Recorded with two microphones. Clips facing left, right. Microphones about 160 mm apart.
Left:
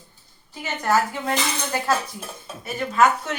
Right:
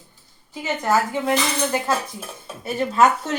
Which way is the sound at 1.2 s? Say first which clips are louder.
Right 4 dB; 15° right (ahead or behind).